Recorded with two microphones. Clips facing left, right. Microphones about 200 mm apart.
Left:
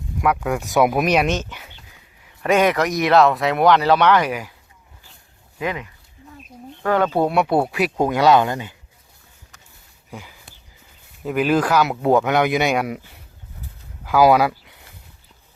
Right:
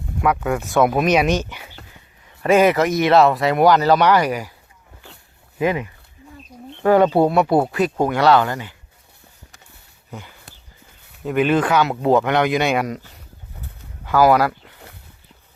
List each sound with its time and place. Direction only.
0.2 s speech: centre (ahead or behind)
1.0 s speech: 5° right (ahead or behind)
2.4 s speech: centre (ahead or behind)
5.5 s speech: 20° right (ahead or behind)
6.8 s speech: 25° right (ahead or behind)
7.3 s speech: 5° left (ahead or behind); by 8.7 s 20° left (ahead or behind)
10.1 s a sound: 5° left (ahead or behind)
11.2 s speech: 5° left (ahead or behind)
14.0 s speech: 10° left (ahead or behind)